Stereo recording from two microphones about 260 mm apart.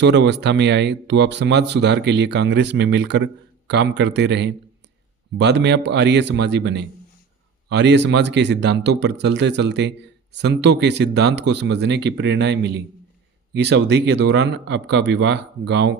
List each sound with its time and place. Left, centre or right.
0.0 s speech: right